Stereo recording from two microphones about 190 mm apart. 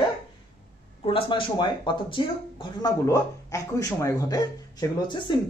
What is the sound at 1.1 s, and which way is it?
Speech, 25° left (ahead or behind).